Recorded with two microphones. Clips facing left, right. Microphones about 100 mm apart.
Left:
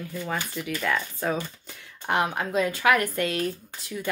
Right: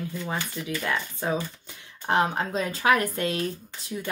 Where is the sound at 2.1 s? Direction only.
30° right (ahead or behind).